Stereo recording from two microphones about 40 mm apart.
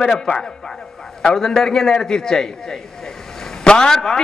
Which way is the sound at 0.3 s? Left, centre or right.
Left.